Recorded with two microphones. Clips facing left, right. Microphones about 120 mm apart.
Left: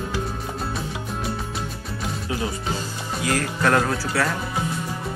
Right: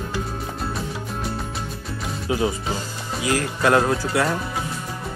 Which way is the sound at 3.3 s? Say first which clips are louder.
Right 2 dB; 10° right (ahead or behind).